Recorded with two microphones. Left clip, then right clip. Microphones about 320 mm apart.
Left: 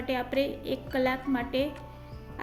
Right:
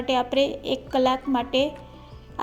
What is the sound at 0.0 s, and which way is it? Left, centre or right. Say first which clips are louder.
A woman's voice: right 7 dB; centre.